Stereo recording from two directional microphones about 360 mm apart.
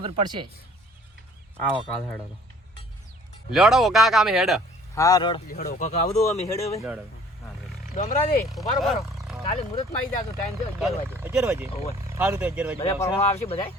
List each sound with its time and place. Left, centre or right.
0.0 s speech: centre
3.5 s speech: centre
5.5 s speech: left
7.9 s speech: left
8.5 s speech: centre
9.5 s speech: centre
10.8 s speech: centre
12.8 s speech: centre